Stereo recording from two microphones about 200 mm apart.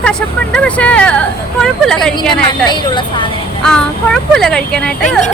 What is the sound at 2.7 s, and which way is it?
Speech, 25° left (ahead or behind).